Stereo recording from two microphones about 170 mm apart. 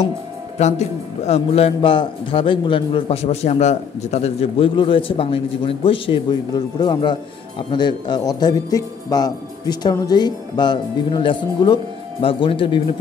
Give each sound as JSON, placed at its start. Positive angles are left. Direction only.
{"t": 0.6, "sound": "a man's voice", "side_deg": 40}